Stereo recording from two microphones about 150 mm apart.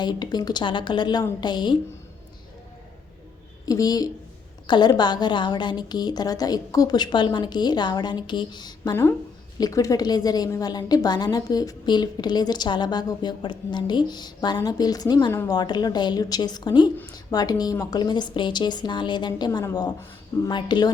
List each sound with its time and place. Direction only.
0.0 s a woman's voice: 30° left (ahead or behind)
3.7 s a woman's voice: 25° left (ahead or behind)
15.3 s a woman's voice: 15° left (ahead or behind)
15.5 s a woman's voice: 25° left (ahead or behind)